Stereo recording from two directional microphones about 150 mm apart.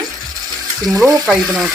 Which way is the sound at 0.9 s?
25° right (ahead or behind).